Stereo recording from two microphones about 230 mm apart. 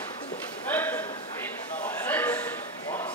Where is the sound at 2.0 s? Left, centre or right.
Centre.